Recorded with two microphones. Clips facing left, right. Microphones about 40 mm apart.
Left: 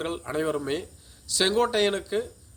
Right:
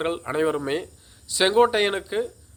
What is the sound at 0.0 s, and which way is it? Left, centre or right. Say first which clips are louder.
Speech: right 5 dB; right.